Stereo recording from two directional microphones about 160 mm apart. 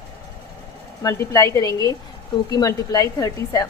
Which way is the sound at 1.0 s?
20° left (ahead or behind).